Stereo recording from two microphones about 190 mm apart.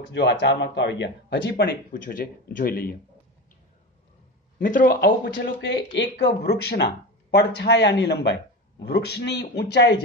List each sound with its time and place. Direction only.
0.1 s speech: 65° left (ahead or behind); by 3.0 s 50° left (ahead or behind)
4.6 s speech: 45° left (ahead or behind); by 9.9 s 65° left (ahead or behind)